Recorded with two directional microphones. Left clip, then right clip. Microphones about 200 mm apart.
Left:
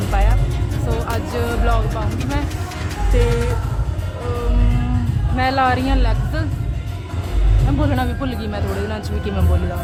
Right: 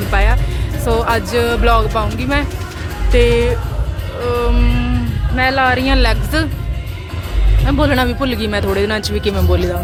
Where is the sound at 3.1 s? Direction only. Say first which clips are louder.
Right 8 dB; 15° right (ahead or behind).